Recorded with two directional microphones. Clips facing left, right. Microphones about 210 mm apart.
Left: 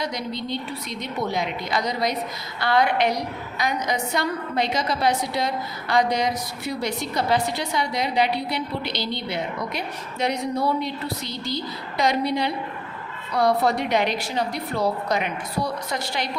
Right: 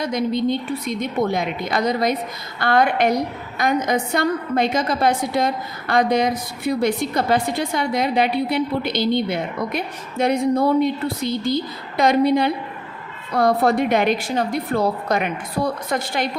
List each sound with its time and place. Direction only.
0.0 s a woman's voice: 50° right (ahead or behind)